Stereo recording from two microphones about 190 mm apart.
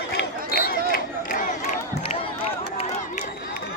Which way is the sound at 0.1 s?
55° left (ahead or behind).